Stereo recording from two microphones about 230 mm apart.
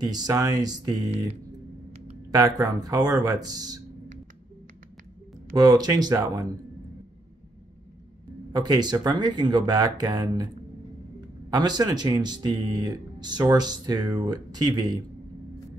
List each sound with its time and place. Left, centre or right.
0.0 s speech: centre
1.9 s a sound: right
2.3 s speech: centre
5.5 s speech: centre
8.5 s speech: centre
11.5 s speech: centre